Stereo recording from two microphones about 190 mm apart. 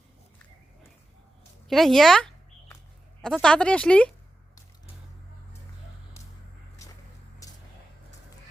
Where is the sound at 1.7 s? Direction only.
Centre (ahead or behind).